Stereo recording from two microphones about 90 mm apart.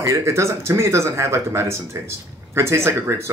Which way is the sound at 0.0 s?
30° right (ahead or behind).